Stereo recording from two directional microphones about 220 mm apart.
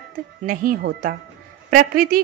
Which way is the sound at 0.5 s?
40° right (ahead or behind).